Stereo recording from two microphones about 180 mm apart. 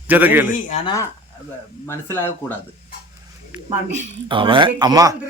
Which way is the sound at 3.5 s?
5° right (ahead or behind).